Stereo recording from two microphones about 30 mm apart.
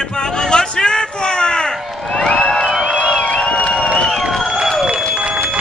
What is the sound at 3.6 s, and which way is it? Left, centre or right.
Crowd, left.